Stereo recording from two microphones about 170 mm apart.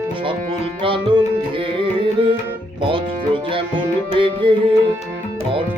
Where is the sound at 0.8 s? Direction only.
30° right (ahead or behind).